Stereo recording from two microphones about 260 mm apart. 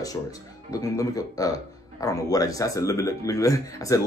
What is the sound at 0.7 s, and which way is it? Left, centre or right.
Speech, centre.